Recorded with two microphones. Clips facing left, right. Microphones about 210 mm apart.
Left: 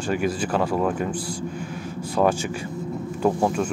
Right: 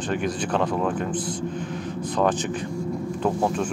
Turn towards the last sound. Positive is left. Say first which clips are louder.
# left 2 dB
turn(degrees=5)  # may be behind; listen again after turning